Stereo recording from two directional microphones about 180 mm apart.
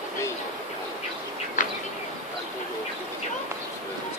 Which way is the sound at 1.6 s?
45° left (ahead or behind).